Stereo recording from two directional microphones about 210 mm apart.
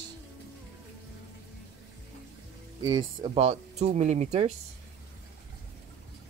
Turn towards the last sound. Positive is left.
turn(degrees=-30)  # may be behind; listen again after turning